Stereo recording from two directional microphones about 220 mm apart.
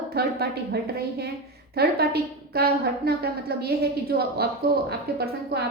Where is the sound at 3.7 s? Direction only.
45° right (ahead or behind).